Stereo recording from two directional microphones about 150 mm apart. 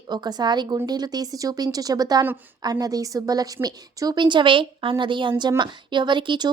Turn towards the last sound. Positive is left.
turn(degrees=-30)  # may be behind; listen again after turning